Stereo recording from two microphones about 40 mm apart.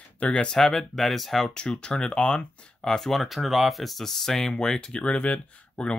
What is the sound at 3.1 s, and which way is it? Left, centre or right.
Speech, centre.